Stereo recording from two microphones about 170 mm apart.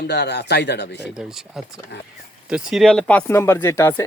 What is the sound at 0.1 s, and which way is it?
Speech, 75° left (ahead or behind).